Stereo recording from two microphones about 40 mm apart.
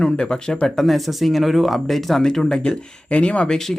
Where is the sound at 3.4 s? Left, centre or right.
Centre.